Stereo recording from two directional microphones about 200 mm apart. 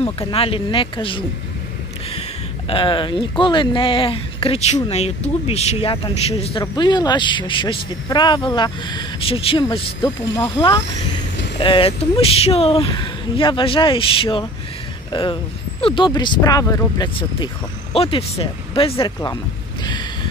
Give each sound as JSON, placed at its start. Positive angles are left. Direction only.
{"t": 0.3, "sound": "speech", "side_deg": 30}
{"t": 2.7, "sound": "speech", "side_deg": 25}